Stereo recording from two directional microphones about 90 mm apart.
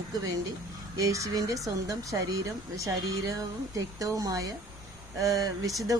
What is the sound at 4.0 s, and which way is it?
Speech, 40° right (ahead or behind).